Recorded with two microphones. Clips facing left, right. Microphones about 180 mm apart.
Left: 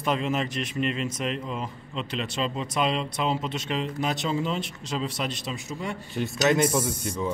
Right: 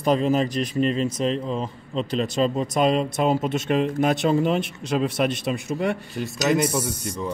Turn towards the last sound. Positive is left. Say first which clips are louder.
# even
turn(degrees=0)  # may be behind; listen again after turning